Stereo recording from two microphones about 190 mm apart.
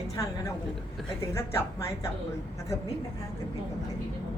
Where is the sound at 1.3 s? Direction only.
15° left (ahead or behind).